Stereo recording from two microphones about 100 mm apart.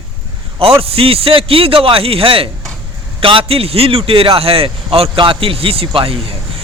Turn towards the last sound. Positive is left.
turn(degrees=-70)  # may be behind; listen again after turning